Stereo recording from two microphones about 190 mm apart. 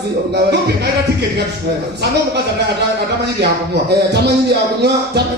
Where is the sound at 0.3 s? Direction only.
60° right (ahead or behind).